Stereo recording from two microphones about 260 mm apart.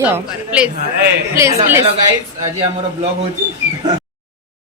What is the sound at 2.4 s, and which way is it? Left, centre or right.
Speech, right.